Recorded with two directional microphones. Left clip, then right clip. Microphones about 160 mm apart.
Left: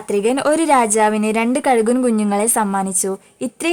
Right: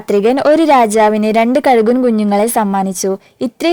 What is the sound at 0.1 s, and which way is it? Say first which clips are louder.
A woman's voice: right 6 dB; 40° right (ahead or behind).